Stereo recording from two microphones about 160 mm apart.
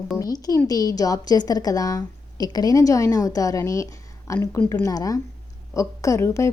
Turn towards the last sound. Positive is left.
turn(degrees=15)  # may be behind; listen again after turning